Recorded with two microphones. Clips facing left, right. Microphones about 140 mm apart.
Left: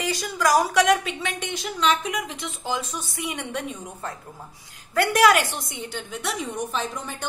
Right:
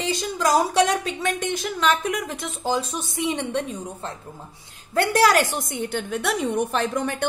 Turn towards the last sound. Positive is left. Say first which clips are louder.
# right 7 dB
turn(degrees=-70)  # may be behind; listen again after turning